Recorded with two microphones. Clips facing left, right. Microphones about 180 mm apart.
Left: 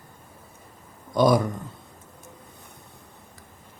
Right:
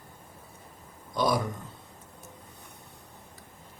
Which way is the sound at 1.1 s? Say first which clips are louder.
Left 8 dB; 50° left (ahead or behind).